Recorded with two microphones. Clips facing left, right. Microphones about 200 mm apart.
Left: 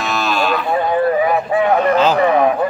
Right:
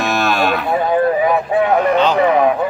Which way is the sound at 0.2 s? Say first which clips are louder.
Even; 60° right (ahead or behind).